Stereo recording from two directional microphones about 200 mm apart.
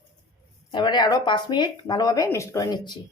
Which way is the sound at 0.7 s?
20° left (ahead or behind).